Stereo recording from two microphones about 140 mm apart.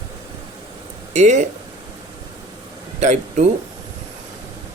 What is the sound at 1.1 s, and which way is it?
Speech, 60° right (ahead or behind).